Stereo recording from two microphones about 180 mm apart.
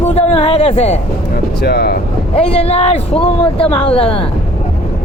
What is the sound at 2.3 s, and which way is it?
Speech, 35° left (ahead or behind).